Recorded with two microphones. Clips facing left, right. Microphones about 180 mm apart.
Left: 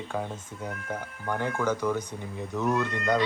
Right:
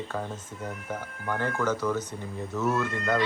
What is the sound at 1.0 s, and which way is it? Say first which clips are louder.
Speech: even; 15° left (ahead or behind).